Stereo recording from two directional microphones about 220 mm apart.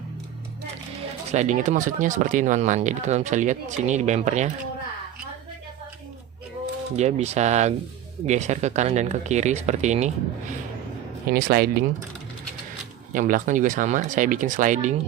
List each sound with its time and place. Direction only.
1.3 s speech: 30° right (ahead or behind)
6.9 s speech: 30° right (ahead or behind)
11.3 s speech: 45° right (ahead or behind)
13.1 s speech: 40° right (ahead or behind)